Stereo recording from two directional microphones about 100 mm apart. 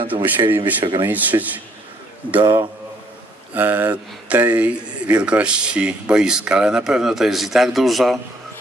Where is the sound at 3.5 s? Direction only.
20° right (ahead or behind).